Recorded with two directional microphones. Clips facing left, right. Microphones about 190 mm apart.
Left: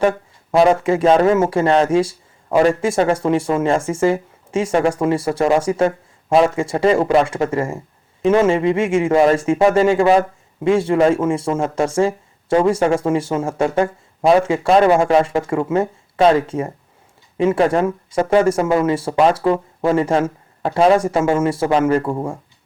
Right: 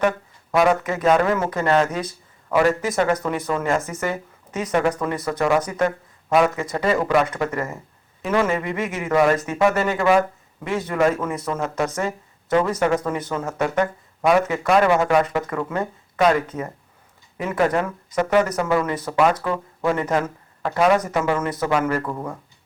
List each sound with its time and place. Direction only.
0.5 s speech: 30° left (ahead or behind)